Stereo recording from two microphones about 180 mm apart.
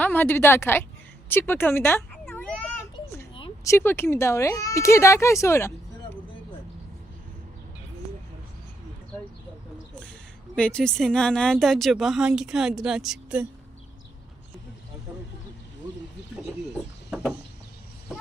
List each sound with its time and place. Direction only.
0.0 s a woman's voice: 10° left (ahead or behind)
3.6 s speech: 15° left (ahead or behind)
9.9 s speech: 5° left (ahead or behind)